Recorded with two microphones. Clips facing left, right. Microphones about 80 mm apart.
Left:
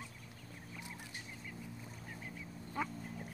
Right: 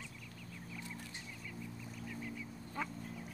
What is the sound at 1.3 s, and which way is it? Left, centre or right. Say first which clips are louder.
Vehicle: right 1 dB; left.